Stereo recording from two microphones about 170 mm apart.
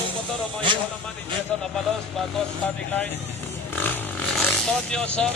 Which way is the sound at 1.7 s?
Centre (ahead or behind).